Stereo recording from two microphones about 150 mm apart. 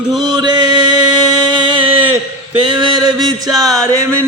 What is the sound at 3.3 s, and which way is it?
Music, 25° right (ahead or behind).